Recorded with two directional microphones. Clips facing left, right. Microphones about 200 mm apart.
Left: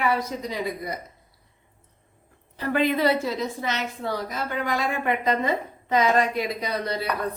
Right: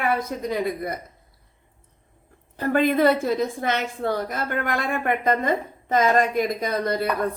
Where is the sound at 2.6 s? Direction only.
50° right (ahead or behind).